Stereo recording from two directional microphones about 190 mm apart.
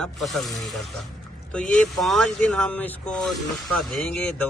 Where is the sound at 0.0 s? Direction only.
Centre (ahead or behind).